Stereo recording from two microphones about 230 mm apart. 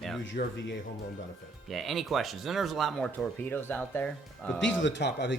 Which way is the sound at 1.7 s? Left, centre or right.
Centre.